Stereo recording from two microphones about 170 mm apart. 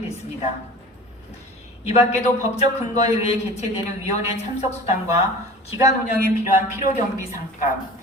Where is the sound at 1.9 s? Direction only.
40° left (ahead or behind).